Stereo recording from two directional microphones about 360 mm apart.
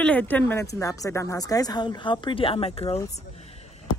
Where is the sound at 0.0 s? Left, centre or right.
Centre.